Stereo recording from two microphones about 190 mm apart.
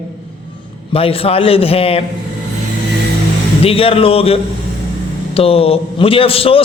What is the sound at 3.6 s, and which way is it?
A man's voice, 30° left (ahead or behind).